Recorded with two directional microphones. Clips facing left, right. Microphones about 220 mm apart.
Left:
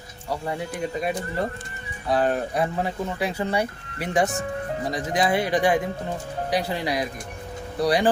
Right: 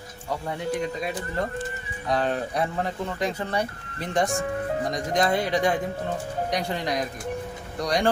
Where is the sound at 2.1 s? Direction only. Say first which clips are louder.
Left 3 dB; 5° left (ahead or behind).